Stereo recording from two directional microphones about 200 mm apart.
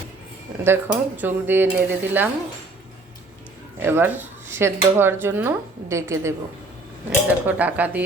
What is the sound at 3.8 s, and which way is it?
Speech, 10° right (ahead or behind).